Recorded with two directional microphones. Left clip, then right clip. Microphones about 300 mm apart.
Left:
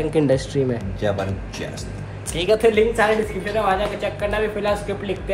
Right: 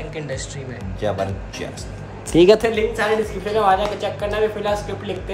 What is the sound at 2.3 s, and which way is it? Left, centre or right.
Speech, right.